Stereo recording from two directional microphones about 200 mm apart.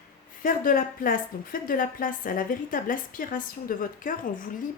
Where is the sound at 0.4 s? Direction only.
45° left (ahead or behind).